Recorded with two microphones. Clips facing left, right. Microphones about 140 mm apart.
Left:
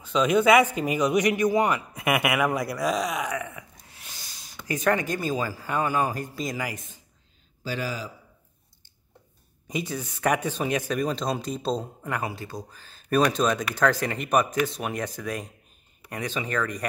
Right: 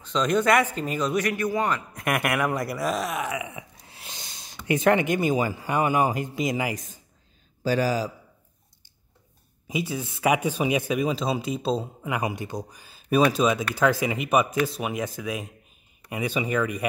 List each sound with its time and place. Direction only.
0.0 s a man's voice: 5° left (ahead or behind)
3.5 s snort: 25° right (ahead or behind)
4.7 s a man's voice: 25° right (ahead or behind)
7.6 s a man's voice: 40° right (ahead or behind)
9.7 s speech: 5° right (ahead or behind)